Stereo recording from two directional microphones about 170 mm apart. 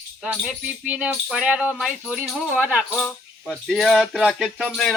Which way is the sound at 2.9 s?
Centre (ahead or behind).